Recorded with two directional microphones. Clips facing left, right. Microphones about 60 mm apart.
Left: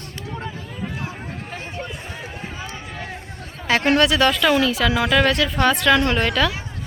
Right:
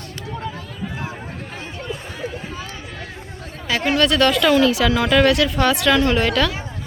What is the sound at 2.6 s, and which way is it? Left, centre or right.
Run, left.